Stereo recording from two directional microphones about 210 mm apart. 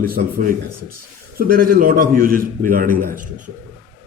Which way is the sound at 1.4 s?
45° right (ahead or behind).